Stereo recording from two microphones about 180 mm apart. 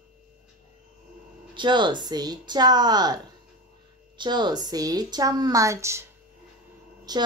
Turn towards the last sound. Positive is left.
turn(degrees=-20)  # may be behind; listen again after turning